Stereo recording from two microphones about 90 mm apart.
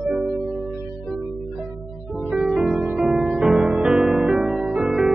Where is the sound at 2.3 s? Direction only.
5° right (ahead or behind).